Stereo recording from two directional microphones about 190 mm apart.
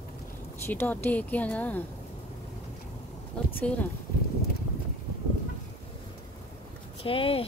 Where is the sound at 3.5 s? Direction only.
10° left (ahead or behind).